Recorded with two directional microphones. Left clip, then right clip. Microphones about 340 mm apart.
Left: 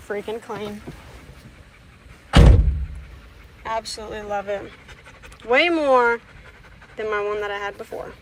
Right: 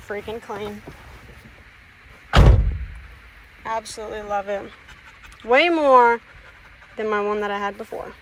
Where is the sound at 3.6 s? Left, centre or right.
Centre.